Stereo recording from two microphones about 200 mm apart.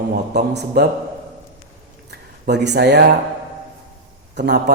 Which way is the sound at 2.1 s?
60° right (ahead or behind).